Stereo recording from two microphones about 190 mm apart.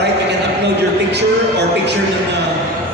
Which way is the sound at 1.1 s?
65° right (ahead or behind).